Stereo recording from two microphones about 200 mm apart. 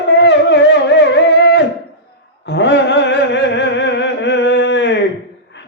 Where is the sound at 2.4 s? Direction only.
60° left (ahead or behind).